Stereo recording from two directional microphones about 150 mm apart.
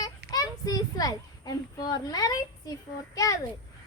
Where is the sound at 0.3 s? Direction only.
25° left (ahead or behind).